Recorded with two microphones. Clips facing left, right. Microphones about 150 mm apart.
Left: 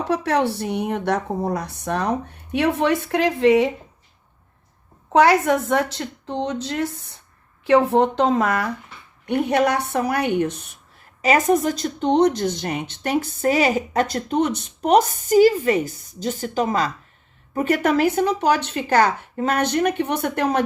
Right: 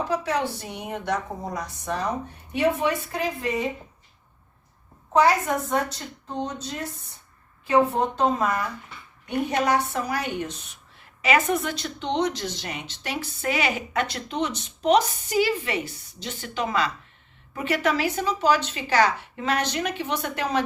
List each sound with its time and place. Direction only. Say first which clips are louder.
0.1 s a woman's voice: left 5 dB; 65° left (ahead or behind); by 3.7 s 90° left
5.1 s a woman's voice: left 5 dB; 80° left
7.6 s a woman's voice: left 5 dB; 75° left (ahead or behind)
9.2 s a woman's voice: left 5 dB; 65° left (ahead or behind)
11.2 s speech: left 5 dB; 40° left (ahead or behind)